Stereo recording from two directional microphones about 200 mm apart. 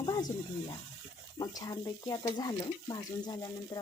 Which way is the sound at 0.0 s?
20° left (ahead or behind).